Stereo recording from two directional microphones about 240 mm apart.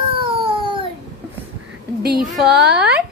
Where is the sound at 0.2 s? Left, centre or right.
Right.